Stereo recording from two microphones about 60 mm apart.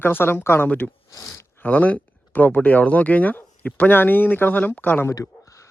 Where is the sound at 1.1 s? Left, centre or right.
Left.